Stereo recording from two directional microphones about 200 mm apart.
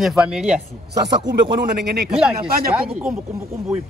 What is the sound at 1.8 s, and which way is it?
Speech, 55° right (ahead or behind).